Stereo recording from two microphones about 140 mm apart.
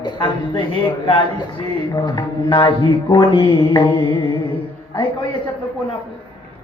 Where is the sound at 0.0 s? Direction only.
35° left (ahead or behind).